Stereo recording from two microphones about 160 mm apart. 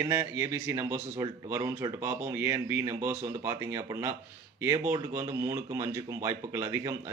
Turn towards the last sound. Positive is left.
turn(degrees=-20)  # may be behind; listen again after turning